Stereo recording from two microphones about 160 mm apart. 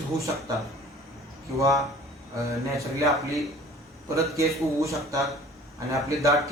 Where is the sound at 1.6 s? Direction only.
20° right (ahead or behind).